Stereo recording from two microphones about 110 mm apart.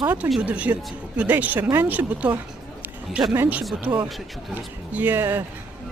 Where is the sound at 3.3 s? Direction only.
20° right (ahead or behind).